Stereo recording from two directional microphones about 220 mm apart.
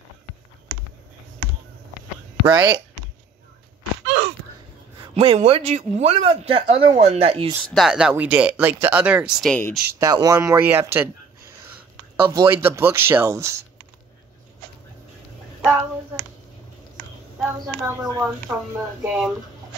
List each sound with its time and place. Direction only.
2.5 s speech: 20° right (ahead or behind)
5.1 s speech: 25° right (ahead or behind)
7.7 s speech: centre (ahead or behind)
9.9 s speech: 15° right (ahead or behind)
15.6 s hands: 10° right (ahead or behind)
17.4 s speech: 10° right (ahead or behind)